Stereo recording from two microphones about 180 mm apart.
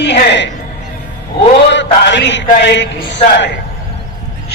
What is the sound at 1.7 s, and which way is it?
Speech, 75° left (ahead or behind).